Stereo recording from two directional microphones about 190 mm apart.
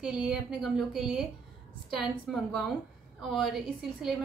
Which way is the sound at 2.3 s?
Centre (ahead or behind).